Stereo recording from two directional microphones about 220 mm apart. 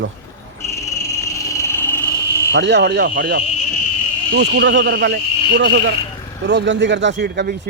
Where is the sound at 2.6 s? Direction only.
50° right (ahead or behind).